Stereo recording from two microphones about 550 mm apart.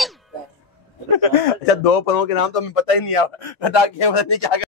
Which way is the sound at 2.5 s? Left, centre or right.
Left.